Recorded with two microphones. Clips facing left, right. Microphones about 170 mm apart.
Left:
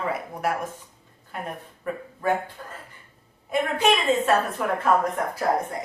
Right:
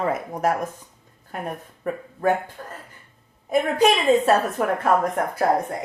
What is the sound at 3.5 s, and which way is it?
Speech, 35° right (ahead or behind).